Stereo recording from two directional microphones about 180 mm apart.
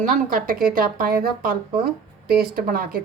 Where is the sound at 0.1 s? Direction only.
50° right (ahead or behind).